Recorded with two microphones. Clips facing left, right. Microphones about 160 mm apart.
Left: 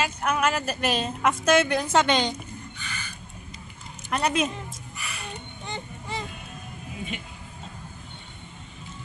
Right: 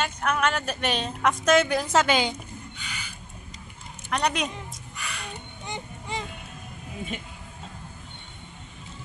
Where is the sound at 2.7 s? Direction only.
15° right (ahead or behind).